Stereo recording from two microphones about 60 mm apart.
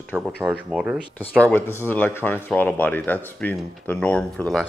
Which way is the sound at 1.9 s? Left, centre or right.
Left.